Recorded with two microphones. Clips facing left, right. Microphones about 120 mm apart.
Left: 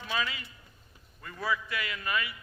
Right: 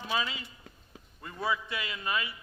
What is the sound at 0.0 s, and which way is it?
A man's voice, 25° right (ahead or behind).